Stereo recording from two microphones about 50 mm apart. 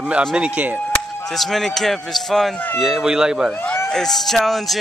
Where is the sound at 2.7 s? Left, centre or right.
Centre.